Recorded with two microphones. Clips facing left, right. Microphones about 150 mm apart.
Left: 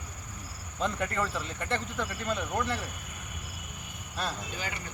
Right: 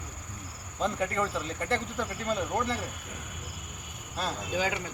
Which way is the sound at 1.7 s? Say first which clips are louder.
Left 2 dB; 35° right (ahead or behind).